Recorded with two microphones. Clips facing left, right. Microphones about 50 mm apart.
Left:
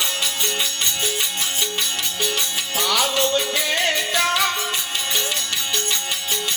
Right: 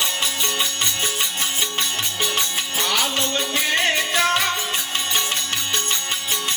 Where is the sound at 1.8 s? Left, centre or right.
Right.